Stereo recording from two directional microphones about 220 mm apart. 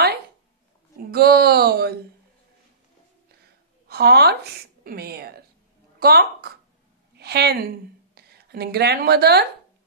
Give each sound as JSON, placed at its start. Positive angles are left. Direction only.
{"t": 1.1, "sound": "speech", "side_deg": -45}
{"t": 3.9, "sound": "a woman's voice", "side_deg": -45}